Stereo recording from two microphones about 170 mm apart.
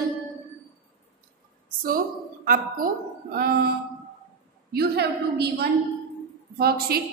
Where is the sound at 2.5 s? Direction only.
55° right (ahead or behind).